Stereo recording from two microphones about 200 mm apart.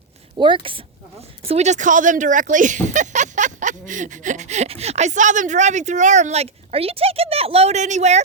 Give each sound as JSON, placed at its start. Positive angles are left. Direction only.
{"t": 0.3, "sound": "a woman's voice", "side_deg": -25}